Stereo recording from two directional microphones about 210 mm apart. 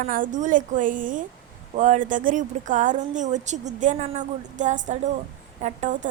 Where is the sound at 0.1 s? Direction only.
40° right (ahead or behind).